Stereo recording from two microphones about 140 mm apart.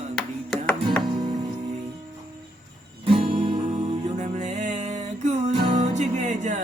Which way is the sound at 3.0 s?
40° right (ahead or behind).